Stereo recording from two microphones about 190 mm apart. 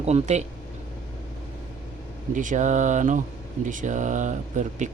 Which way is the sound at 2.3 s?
45° right (ahead or behind).